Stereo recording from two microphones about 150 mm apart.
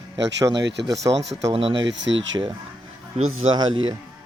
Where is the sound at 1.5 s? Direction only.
40° right (ahead or behind).